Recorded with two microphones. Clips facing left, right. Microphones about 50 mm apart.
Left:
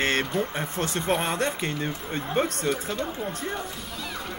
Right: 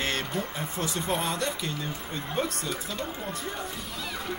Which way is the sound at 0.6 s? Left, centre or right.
Left.